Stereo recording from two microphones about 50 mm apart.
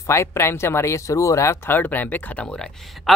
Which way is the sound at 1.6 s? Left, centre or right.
Left.